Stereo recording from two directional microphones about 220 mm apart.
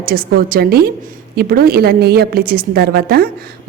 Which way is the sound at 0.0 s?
40° right (ahead or behind).